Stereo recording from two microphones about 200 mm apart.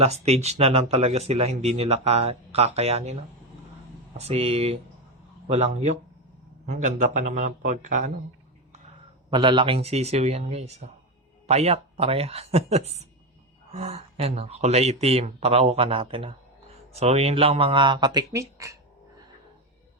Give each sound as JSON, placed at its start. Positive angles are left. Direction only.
{"t": 0.0, "sound": "speech", "side_deg": -30}
{"t": 4.2, "sound": "speech", "side_deg": -30}
{"t": 9.3, "sound": "speech", "side_deg": -25}